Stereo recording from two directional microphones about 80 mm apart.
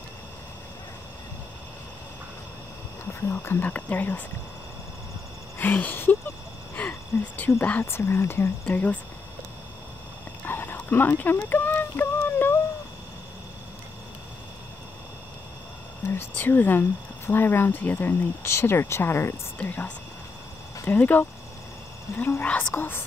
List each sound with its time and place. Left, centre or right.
3.1 s speech: left
5.6 s speech: left
6.7 s a sound: left
7.8 s speech: left
8.6 s speech: centre
10.4 s a sound: left
16.1 s speech: left
18.4 s speech: left
19.6 s speech: left
20.9 s speech: left
22.1 s speech: left
22.4 s speech: left